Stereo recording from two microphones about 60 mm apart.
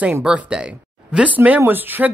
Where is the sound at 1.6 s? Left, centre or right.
Right.